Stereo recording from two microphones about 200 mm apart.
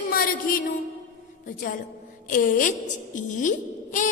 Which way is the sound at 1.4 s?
40° left (ahead or behind).